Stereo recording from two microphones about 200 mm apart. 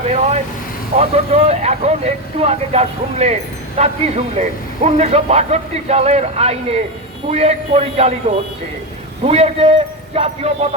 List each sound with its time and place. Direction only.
0.0 s a man's voice: 30° right (ahead or behind)